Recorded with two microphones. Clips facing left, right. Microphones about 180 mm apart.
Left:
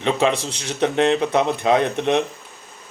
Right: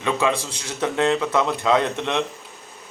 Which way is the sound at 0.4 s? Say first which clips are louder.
Left 4 dB; 65° left (ahead or behind).